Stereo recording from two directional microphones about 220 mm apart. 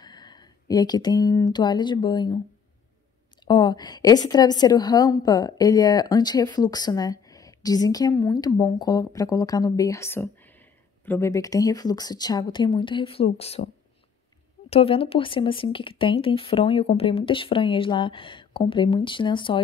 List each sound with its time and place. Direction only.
0.0 s speech: 20° left (ahead or behind)
3.4 s a woman's voice: 20° left (ahead or behind)
14.7 s speech: 25° left (ahead or behind)